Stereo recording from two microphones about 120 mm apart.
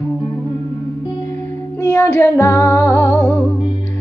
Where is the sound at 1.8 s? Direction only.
20° left (ahead or behind).